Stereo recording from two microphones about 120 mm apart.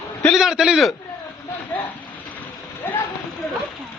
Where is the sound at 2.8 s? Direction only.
20° left (ahead or behind).